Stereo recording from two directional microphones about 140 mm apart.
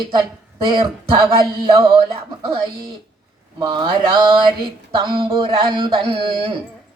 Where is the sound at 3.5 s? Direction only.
30° right (ahead or behind).